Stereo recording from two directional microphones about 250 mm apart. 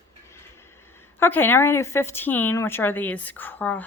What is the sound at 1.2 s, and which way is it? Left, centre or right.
A child's voice, centre.